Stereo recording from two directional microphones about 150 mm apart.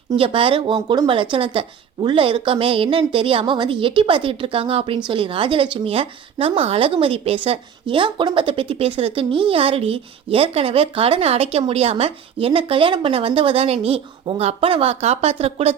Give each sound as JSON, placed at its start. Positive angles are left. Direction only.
{"t": 0.2, "sound": "speech", "side_deg": -35}